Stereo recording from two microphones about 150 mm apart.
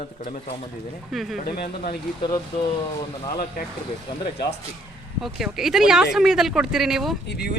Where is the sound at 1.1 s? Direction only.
Centre (ahead or behind).